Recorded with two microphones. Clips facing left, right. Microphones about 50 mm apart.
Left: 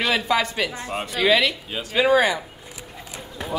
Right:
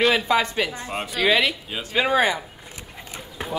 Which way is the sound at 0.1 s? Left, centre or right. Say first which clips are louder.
Right 1 dB; right.